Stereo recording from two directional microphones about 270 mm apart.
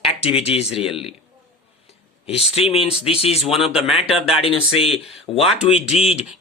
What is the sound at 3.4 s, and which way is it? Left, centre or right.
Speech, centre.